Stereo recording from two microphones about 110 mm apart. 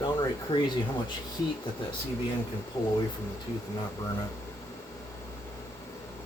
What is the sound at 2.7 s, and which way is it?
Speech, 30° left (ahead or behind).